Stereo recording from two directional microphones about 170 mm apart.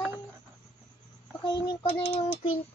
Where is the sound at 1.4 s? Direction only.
25° left (ahead or behind).